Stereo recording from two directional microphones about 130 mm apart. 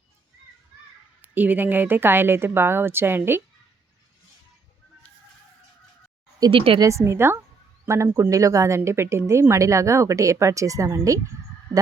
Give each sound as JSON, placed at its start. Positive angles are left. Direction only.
{"t": 1.2, "sound": "a woman's voice", "side_deg": -15}
{"t": 6.5, "sound": "speech", "side_deg": -45}
{"t": 6.7, "sound": "a woman's voice", "side_deg": -25}